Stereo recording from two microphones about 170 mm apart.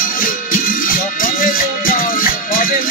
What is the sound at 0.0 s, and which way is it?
Music, 55° left (ahead or behind).